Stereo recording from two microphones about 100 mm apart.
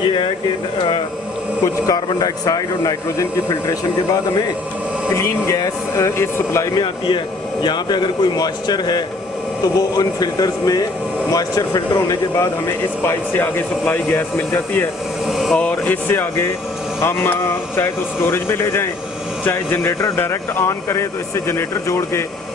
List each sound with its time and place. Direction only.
1.9 s speech: 40° left (ahead or behind)
7.6 s speech: 50° left (ahead or behind)
12.4 s speech: 25° left (ahead or behind)